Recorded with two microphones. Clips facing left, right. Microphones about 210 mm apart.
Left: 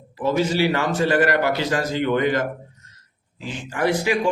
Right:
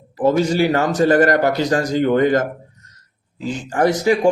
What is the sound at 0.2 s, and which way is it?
Speech, 40° right (ahead or behind).